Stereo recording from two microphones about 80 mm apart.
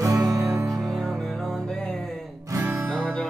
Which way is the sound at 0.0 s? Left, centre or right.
Right.